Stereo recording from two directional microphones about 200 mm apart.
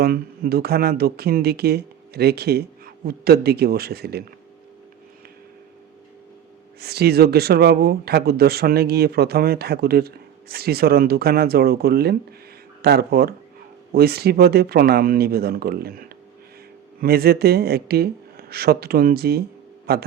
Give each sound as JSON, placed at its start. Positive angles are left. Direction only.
{"t": 0.0, "sound": "speech", "side_deg": -50}
{"t": 6.7, "sound": "speech", "side_deg": -55}